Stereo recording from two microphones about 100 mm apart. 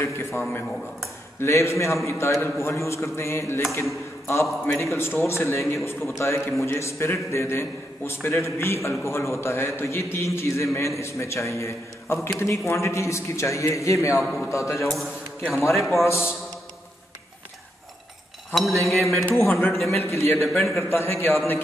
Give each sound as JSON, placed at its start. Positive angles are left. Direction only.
{"t": 0.0, "sound": "a man's voice", "side_deg": 25}
{"t": 4.9, "sound": "a man's voice", "side_deg": 25}
{"t": 14.2, "sound": "music", "side_deg": 0}
{"t": 14.5, "sound": "a man's voice", "side_deg": 30}
{"t": 15.0, "sound": "a man's voice", "side_deg": 0}
{"t": 15.7, "sound": "music", "side_deg": 0}
{"t": 16.0, "sound": "a man's voice", "side_deg": 25}
{"t": 18.9, "sound": "music", "side_deg": 0}
{"t": 19.3, "sound": "a man's voice", "side_deg": 20}
{"t": 20.3, "sound": "music", "side_deg": 0}
{"t": 20.6, "sound": "a man's voice", "side_deg": 30}